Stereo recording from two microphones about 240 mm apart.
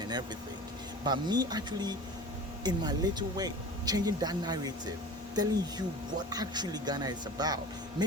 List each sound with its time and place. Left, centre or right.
1.0 s speech: centre